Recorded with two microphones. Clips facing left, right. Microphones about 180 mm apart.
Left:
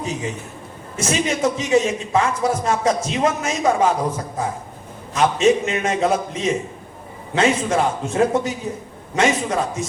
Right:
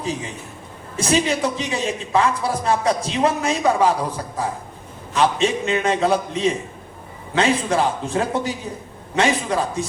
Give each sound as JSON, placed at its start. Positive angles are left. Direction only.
{"t": 0.9, "sound": "a man's voice", "side_deg": -35}